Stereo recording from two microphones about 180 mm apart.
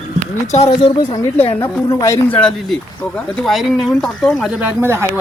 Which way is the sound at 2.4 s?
5° left (ahead or behind).